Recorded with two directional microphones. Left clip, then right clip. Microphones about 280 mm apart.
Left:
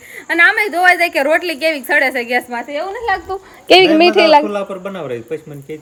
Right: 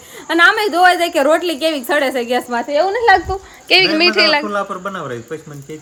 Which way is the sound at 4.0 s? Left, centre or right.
Centre.